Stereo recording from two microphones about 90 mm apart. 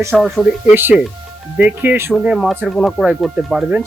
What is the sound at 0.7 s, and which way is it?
Speech, 20° right (ahead or behind).